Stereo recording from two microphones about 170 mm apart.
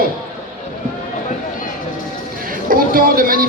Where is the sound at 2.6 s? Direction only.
55° right (ahead or behind).